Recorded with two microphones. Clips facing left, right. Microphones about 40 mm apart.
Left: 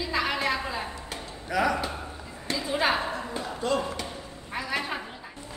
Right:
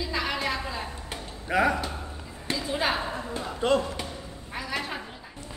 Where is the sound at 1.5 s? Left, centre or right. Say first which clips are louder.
Right 2 dB; right.